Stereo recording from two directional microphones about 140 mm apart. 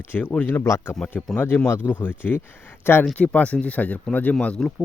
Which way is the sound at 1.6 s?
15° left (ahead or behind).